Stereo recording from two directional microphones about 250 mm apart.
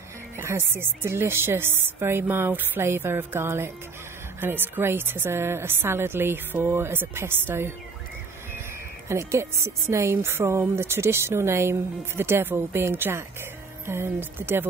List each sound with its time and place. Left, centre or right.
0.4 s a woman's voice: centre
9.1 s a woman's voice: centre